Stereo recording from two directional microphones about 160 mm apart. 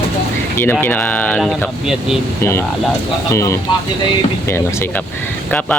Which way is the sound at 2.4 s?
15° left (ahead or behind).